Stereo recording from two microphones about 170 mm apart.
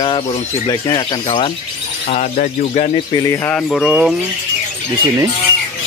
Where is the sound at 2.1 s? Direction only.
45° left (ahead or behind).